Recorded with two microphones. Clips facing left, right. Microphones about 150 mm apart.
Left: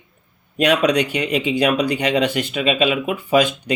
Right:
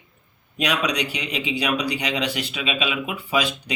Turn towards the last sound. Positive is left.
turn(degrees=50)  # may be behind; listen again after turning